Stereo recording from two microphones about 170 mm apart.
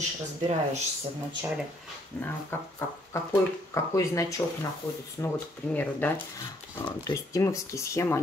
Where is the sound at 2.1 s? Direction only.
15° left (ahead or behind).